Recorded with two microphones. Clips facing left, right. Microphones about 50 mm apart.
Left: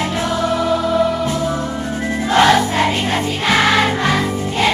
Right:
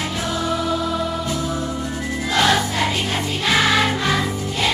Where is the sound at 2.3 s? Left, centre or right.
Left.